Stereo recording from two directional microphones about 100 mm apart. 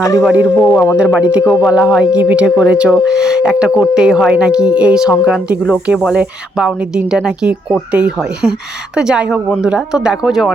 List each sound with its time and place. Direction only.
0.3 s speech: 10° right (ahead or behind)
0.7 s speech: 15° left (ahead or behind)
0.9 s speech: 10° right (ahead or behind)
1.6 s speech: centre (ahead or behind)
2.0 s speech: 10° right (ahead or behind)